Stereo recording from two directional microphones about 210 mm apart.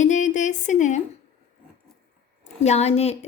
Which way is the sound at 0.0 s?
35° left (ahead or behind).